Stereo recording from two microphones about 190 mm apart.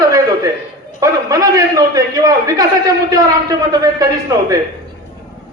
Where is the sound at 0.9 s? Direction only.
15° right (ahead or behind).